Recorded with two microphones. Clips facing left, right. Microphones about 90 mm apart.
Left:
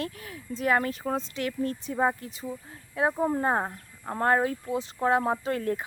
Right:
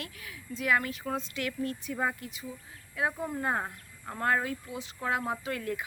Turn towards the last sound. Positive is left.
turn(degrees=40)  # may be behind; listen again after turning